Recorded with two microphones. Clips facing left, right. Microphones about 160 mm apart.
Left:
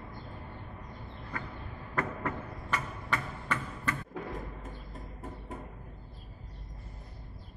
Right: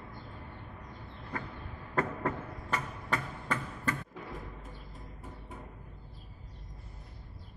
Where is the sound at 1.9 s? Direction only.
35° right (ahead or behind).